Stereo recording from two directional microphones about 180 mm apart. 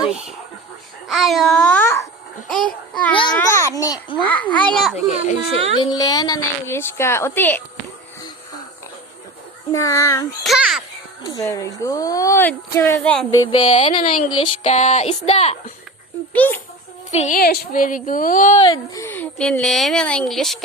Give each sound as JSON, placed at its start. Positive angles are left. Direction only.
{"t": 1.0, "sound": "a woman's voice", "side_deg": 0}
{"t": 5.8, "sound": "a woman's voice", "side_deg": 20}
{"t": 9.7, "sound": "a woman's voice", "side_deg": 15}
{"t": 10.4, "sound": "a woman's voice", "side_deg": 0}
{"t": 11.3, "sound": "a woman's voice", "side_deg": 20}
{"t": 13.3, "sound": "speech", "side_deg": 20}
{"t": 13.7, "sound": "speech", "side_deg": 40}
{"t": 16.3, "sound": "a woman's voice", "side_deg": 10}
{"t": 17.1, "sound": "a woman's voice", "side_deg": 40}
{"t": 17.3, "sound": "speech", "side_deg": 55}
{"t": 18.6, "sound": "speech", "side_deg": 25}
{"t": 19.0, "sound": "a woman's voice", "side_deg": 10}